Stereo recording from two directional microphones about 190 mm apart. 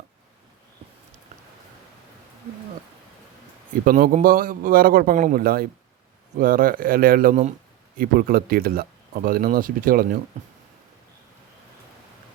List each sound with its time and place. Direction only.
3.7 s speech: 45° right (ahead or behind)